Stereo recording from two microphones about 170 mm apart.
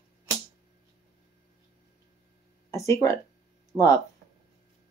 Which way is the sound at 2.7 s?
20° left (ahead or behind).